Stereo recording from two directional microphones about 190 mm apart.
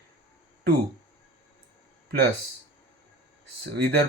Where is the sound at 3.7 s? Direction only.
55° right (ahead or behind).